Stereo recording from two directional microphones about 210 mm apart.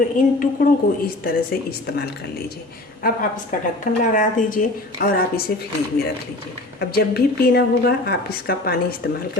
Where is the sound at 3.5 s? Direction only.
40° left (ahead or behind).